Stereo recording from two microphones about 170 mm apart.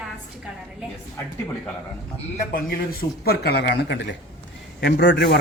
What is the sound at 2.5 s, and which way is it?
A man's voice, 60° left (ahead or behind).